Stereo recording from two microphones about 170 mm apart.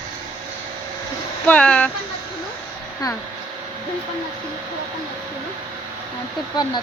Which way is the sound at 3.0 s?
20° left (ahead or behind).